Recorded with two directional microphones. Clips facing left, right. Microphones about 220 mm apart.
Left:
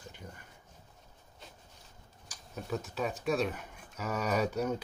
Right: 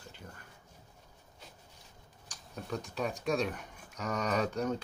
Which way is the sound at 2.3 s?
5° left (ahead or behind).